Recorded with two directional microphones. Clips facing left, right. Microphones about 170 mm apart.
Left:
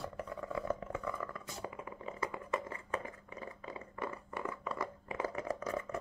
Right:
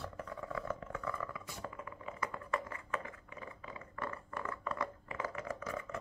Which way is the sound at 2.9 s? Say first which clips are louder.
Left 2 dB; 35° left (ahead or behind).